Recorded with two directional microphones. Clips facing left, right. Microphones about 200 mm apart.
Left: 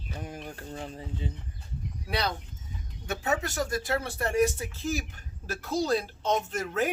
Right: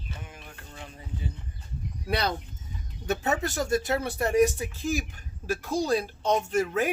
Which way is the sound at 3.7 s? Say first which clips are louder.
Right 4 dB; 20° right (ahead or behind).